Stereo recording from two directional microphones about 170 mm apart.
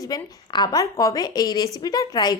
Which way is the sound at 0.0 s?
25° left (ahead or behind).